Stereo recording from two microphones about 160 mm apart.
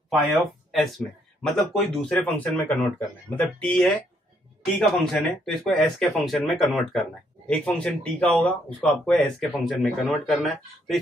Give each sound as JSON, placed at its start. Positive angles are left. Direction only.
{"t": 0.1, "sound": "speech", "side_deg": 0}